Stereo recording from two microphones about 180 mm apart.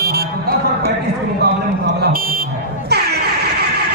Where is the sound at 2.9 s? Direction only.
65° right (ahead or behind).